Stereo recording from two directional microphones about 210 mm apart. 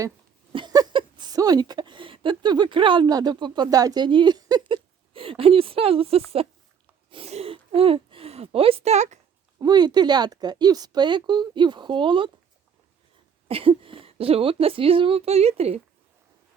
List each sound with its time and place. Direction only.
0.5 s a woman's voice: 20° right (ahead or behind)
9.6 s speech: 20° right (ahead or behind)
13.5 s speech: 25° right (ahead or behind)